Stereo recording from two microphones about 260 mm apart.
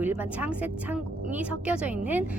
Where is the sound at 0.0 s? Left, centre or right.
Centre.